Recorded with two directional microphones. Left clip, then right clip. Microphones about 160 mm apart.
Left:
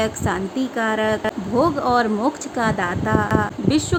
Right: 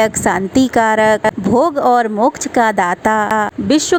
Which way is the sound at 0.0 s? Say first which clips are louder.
Right 8 dB; 60° right (ahead or behind).